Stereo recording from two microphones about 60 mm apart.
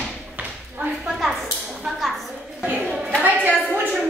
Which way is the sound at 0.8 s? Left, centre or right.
Centre.